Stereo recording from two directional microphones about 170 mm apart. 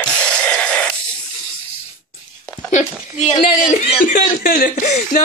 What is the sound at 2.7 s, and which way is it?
Speech, 45° left (ahead or behind).